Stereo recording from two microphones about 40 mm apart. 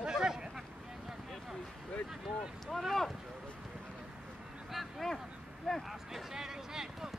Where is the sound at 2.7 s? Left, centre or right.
Centre.